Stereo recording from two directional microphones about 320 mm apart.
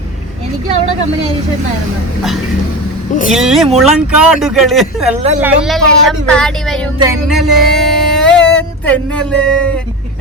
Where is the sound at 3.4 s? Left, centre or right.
Centre.